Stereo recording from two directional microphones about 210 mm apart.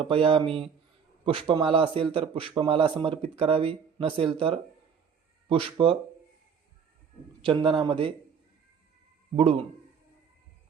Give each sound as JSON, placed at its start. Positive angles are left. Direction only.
{"t": 0.0, "sound": "speech", "side_deg": -25}
{"t": 7.4, "sound": "speech", "side_deg": -25}
{"t": 9.3, "sound": "speech", "side_deg": -25}